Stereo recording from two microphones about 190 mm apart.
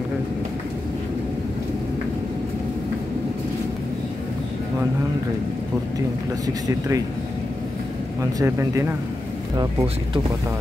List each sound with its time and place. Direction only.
5.9 s speech: 15° right (ahead or behind)
8.2 s speech: 15° right (ahead or behind)